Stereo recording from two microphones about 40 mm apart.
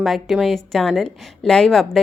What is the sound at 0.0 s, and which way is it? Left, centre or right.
Speech, centre.